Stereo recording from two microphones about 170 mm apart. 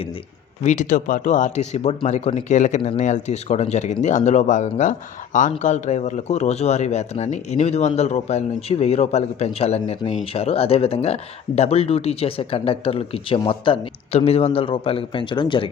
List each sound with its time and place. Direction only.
0.6 s speech: 45° left (ahead or behind); by 15.7 s 30° left (ahead or behind)